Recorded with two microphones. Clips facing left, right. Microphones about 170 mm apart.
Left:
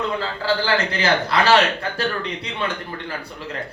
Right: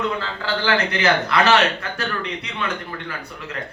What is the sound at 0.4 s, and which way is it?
Speech, 30° left (ahead or behind).